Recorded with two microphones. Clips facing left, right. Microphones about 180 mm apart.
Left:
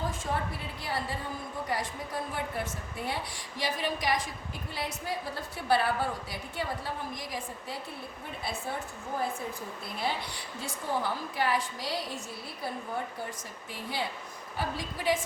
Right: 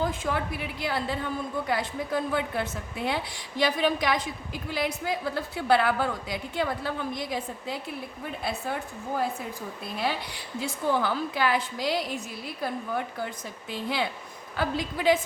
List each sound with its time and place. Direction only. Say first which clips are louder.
0.0 s a woman's voice: right 5 dB; 85° right
10.6 s a woman's voice: right 6 dB; 85° right